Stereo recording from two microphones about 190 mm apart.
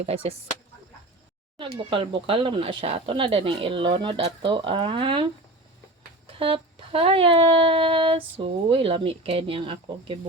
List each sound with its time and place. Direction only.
0.0 s speech: 30° right (ahead or behind)
1.5 s speech: 25° right (ahead or behind)